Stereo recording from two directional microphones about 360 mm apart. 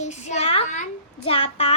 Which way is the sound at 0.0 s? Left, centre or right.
Centre.